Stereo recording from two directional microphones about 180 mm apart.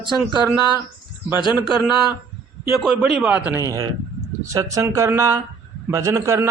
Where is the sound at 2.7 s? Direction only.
Centre (ahead or behind).